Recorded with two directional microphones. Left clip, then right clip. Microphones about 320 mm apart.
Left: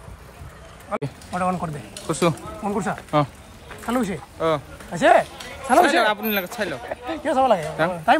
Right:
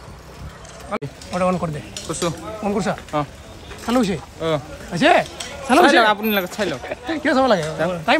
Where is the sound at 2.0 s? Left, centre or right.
Left.